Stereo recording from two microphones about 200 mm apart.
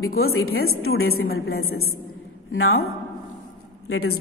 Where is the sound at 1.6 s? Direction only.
90° left.